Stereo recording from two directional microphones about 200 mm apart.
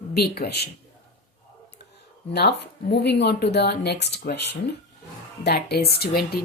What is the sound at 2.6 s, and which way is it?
A woman's voice, 60° left (ahead or behind).